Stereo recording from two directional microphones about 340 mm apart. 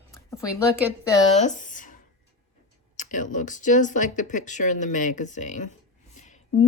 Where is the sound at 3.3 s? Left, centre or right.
Left.